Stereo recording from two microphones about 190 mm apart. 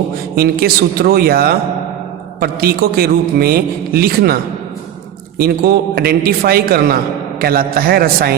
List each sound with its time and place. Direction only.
0.3 s a man's voice: 55° right (ahead or behind)
5.4 s a man's voice: 55° right (ahead or behind)